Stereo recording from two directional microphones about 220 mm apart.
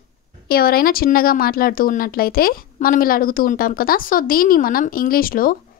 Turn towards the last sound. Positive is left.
turn(degrees=40)  # may be behind; listen again after turning